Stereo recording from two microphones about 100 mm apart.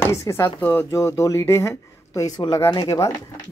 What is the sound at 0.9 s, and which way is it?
Speech, 30° left (ahead or behind).